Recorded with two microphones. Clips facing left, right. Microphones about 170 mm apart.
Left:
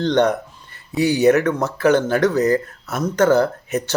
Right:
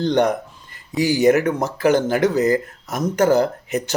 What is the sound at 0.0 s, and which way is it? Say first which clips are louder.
Speech: left 1 dB; 15° right (ahead or behind).